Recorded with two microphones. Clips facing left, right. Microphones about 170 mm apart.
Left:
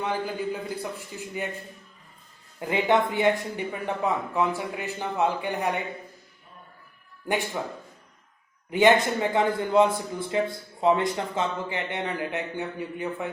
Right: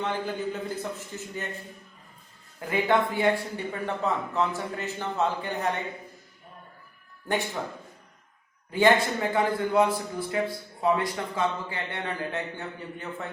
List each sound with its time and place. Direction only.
0.0 s a man's voice: 10° left (ahead or behind)
2.6 s a man's voice: 20° left (ahead or behind)
8.7 s a man's voice: 20° left (ahead or behind)